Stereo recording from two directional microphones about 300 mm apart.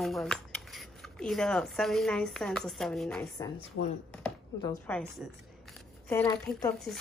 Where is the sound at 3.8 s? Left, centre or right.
Left.